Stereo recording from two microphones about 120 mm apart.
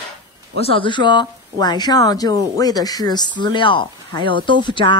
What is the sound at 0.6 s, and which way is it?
Speech, 45° left (ahead or behind).